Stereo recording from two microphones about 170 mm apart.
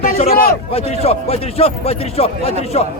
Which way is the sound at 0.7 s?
35° left (ahead or behind).